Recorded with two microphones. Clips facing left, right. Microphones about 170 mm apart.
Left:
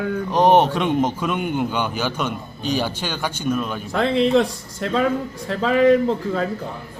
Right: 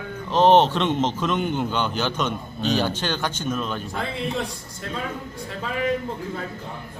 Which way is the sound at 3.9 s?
90° left.